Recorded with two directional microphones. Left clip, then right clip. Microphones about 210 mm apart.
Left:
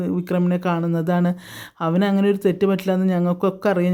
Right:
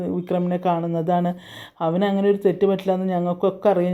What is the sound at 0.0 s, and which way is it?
Speech, 25° left (ahead or behind).